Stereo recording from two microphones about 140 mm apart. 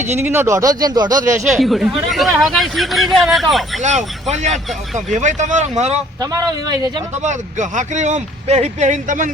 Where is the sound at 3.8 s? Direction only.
55° right (ahead or behind).